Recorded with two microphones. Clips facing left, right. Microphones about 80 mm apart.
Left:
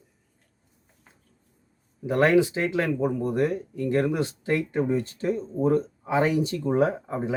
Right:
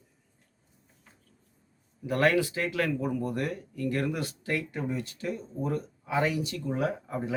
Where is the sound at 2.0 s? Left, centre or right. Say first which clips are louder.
Left 5 dB; left.